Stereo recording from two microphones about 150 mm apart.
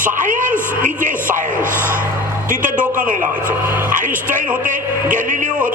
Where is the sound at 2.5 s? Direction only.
60° right (ahead or behind).